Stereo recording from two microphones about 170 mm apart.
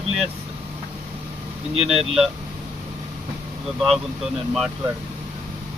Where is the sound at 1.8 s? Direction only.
40° right (ahead or behind).